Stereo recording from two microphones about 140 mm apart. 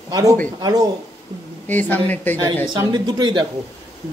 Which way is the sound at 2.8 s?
30° right (ahead or behind).